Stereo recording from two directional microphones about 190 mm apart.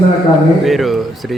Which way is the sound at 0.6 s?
Centre (ahead or behind).